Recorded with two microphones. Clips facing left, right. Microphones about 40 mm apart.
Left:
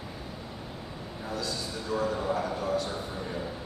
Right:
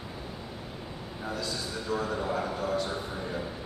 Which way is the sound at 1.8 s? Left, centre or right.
Centre.